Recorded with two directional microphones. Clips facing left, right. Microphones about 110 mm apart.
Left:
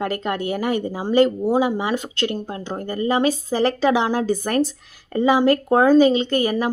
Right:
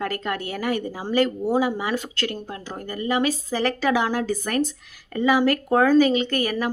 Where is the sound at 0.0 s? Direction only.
25° left (ahead or behind).